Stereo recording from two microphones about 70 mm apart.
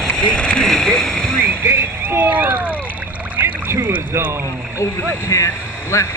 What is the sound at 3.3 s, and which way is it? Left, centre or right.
Boat, right.